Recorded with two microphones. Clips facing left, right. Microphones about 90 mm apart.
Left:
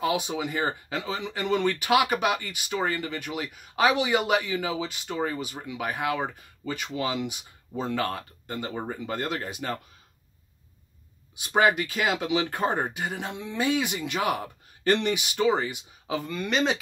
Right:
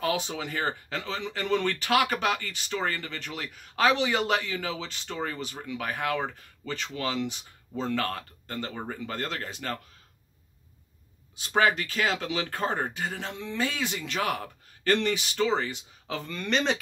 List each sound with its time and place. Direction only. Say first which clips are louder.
0.0 s speech: left 2 dB; 15° left (ahead or behind)
11.3 s speech: left 2 dB; 15° left (ahead or behind)